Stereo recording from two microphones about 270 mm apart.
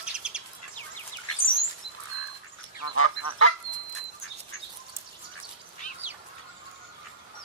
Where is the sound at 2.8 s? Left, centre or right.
Left.